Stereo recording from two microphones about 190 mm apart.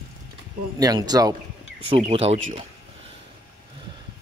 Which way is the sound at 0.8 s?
20° right (ahead or behind).